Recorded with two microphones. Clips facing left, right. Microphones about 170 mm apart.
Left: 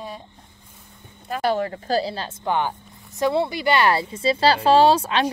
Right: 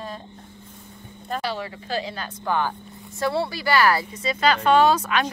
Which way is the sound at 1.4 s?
50° left (ahead or behind).